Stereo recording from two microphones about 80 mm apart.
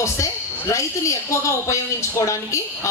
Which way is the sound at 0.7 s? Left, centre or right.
Left.